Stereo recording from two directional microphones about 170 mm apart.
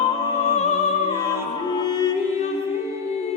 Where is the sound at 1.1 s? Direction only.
15° right (ahead or behind).